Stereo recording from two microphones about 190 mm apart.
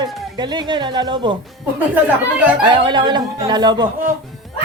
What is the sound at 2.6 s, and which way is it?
Speech, 25° right (ahead or behind).